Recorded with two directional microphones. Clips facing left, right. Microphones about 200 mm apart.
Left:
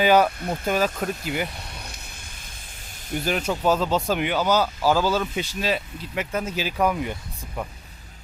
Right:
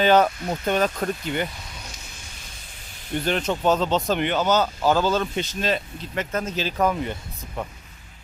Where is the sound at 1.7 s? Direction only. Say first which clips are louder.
Left 1 dB; 60° left (ahead or behind).